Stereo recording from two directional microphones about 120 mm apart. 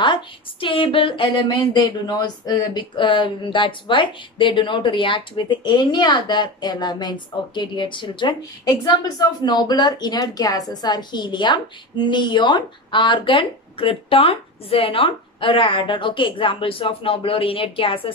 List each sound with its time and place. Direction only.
0.0 s speech: 45° left (ahead or behind)